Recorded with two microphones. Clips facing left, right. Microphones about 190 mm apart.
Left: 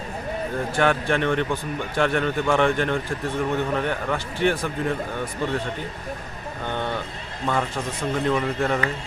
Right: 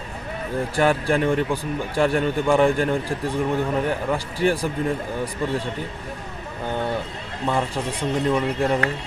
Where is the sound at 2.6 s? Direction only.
35° right (ahead or behind).